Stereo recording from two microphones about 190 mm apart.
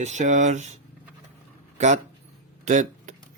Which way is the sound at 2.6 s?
45° right (ahead or behind).